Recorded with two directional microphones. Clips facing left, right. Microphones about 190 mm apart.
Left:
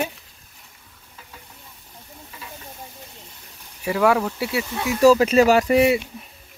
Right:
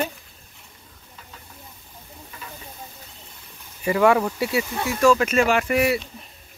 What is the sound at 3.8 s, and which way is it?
Speech, centre (ahead or behind).